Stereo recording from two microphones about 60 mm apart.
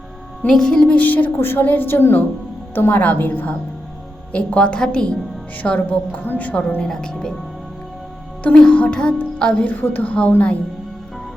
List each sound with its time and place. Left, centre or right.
0.4 s a woman's voice: centre; by 3.5 s left
4.3 s music: left
5.6 s a woman's voice: left
6.8 s music: centre
8.5 s music: centre
9.8 s a woman's voice: left
10.1 s a woman's voice: left